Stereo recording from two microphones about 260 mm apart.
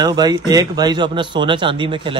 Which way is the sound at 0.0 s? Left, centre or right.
Centre.